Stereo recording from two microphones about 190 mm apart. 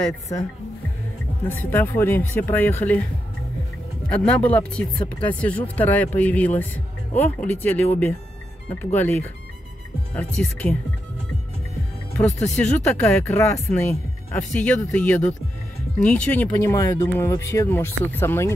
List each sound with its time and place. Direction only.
0.3 s speech: 20° left (ahead or behind)
1.6 s speech: 10° left (ahead or behind)
4.1 s speech: 5° left (ahead or behind)
12.3 s speech: 35° left (ahead or behind)
12.8 s speech: 10° left (ahead or behind)